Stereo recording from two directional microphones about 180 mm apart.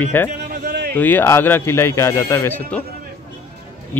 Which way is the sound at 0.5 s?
60° right (ahead or behind).